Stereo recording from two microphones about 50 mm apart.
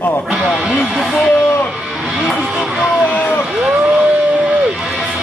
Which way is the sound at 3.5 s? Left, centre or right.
Centre.